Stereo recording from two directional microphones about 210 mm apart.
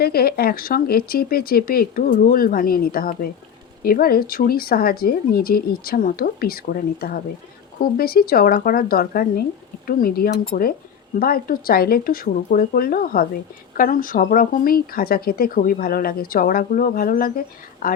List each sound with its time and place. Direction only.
0.0 s speech: 45° left (ahead or behind)